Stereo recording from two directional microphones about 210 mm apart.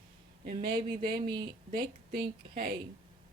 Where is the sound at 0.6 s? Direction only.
20° right (ahead or behind).